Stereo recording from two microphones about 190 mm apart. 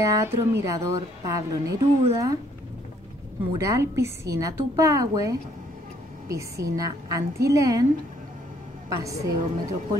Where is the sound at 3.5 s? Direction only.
15° right (ahead or behind).